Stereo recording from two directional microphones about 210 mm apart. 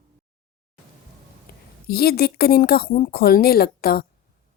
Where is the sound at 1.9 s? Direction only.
50° left (ahead or behind).